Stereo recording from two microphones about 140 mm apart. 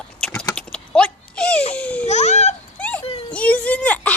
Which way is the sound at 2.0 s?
55° left (ahead or behind).